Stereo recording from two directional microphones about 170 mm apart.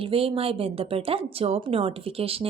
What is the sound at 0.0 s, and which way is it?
Speech, 30° right (ahead or behind).